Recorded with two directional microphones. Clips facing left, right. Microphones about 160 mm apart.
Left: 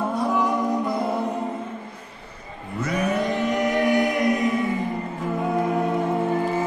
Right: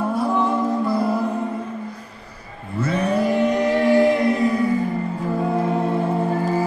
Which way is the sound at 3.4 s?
25° right (ahead or behind).